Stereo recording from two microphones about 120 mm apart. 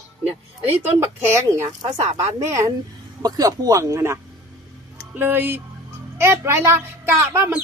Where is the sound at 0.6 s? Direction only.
20° right (ahead or behind).